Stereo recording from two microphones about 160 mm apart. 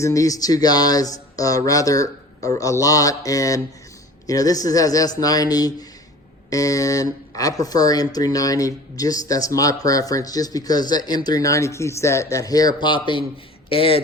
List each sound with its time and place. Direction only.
0.0 s speech: 20° left (ahead or behind)